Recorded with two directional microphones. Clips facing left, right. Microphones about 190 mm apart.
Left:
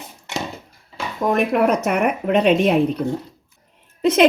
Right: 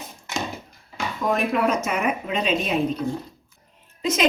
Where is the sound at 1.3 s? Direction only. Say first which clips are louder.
Left 5 dB; 60° left (ahead or behind).